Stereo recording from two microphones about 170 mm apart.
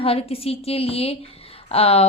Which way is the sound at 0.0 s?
35° left (ahead or behind).